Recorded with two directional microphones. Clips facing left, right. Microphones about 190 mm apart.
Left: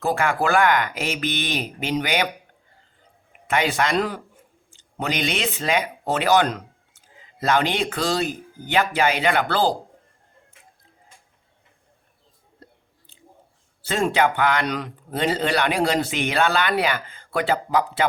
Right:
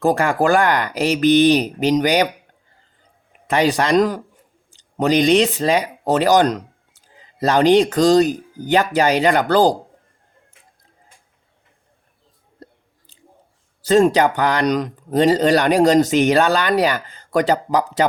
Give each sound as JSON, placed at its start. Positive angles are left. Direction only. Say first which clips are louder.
{"t": 0.0, "sound": "speech", "louder": "right 5 dB", "side_deg": -40}
{"t": 3.4, "sound": "speech", "louder": "right 5 dB", "side_deg": -40}
{"t": 13.8, "sound": "speech", "louder": "right 7 dB", "side_deg": -40}